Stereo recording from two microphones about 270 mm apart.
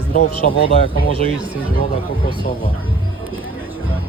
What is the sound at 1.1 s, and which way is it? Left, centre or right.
Speech, centre.